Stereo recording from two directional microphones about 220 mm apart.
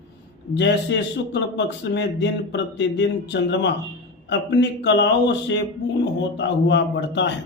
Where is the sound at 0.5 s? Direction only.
50° left (ahead or behind).